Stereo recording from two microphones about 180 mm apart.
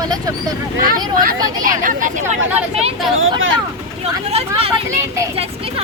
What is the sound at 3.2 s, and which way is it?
Speech, 90° right.